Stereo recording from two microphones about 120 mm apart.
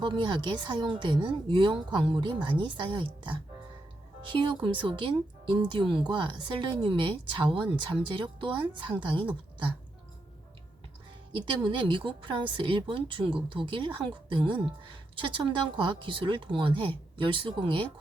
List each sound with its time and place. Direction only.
0.0 s speech: 40° right (ahead or behind)
11.6 s speech: 45° right (ahead or behind)